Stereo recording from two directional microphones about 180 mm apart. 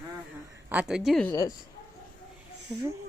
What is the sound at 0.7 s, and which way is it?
Speech, 5° right (ahead or behind).